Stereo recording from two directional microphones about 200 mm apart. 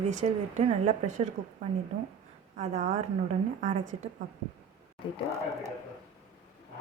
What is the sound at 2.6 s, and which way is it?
A woman's voice, 35° right (ahead or behind).